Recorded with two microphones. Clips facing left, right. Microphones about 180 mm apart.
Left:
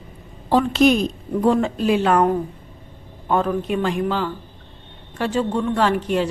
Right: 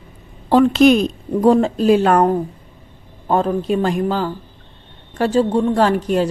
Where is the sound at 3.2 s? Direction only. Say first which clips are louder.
Right 3 dB; 35° right (ahead or behind).